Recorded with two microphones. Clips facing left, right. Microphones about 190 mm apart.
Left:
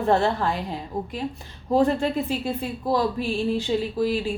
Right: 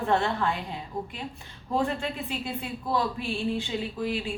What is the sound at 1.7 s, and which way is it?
Speech, 40° left (ahead or behind).